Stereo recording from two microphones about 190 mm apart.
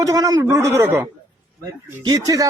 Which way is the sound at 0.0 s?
15° right (ahead or behind).